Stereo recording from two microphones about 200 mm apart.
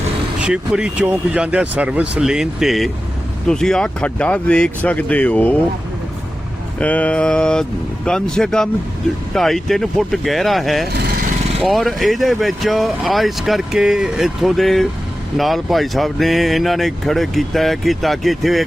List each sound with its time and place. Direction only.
0.3 s speech: 5° right (ahead or behind)
6.7 s speech: 5° left (ahead or behind)